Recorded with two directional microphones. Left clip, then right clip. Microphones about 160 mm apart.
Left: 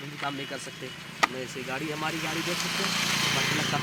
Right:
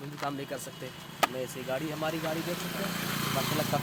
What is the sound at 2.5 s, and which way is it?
Speech, 60° right (ahead or behind).